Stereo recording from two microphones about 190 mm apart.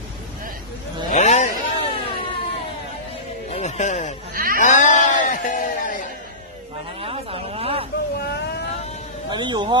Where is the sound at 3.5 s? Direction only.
35° left (ahead or behind).